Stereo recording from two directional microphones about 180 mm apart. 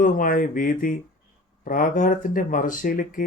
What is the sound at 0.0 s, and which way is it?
Speech, 50° left (ahead or behind).